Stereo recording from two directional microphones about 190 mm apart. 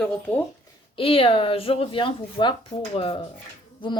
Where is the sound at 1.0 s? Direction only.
30° left (ahead or behind).